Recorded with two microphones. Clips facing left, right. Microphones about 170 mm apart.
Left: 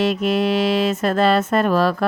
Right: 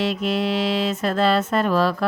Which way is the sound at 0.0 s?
50° left (ahead or behind).